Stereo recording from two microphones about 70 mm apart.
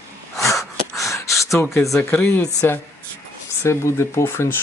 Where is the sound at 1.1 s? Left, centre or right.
Left.